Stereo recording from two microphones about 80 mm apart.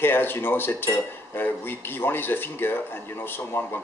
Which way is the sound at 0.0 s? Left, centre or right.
Left.